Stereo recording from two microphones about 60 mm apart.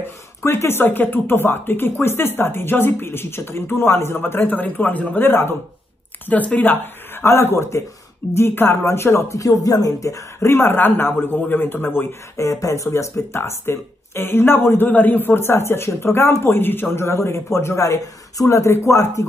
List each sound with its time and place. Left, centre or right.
0.4 s speech: left
6.2 s speech: left
9.4 s speech: left
12.4 s speech: left